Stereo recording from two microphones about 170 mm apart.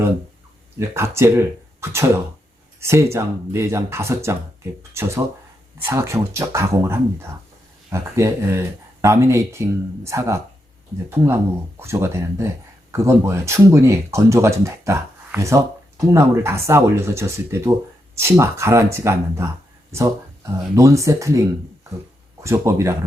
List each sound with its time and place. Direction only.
0.8 s speech: 15° right (ahead or behind)
5.8 s speech: 15° right (ahead or behind)